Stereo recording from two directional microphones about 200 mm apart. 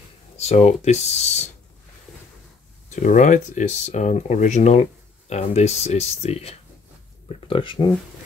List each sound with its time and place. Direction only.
0.4 s speech: 30° left (ahead or behind)
2.9 s speech: 40° left (ahead or behind)